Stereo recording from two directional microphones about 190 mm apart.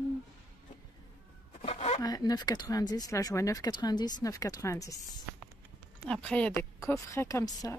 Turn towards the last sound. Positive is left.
turn(degrees=20)  # may be behind; listen again after turning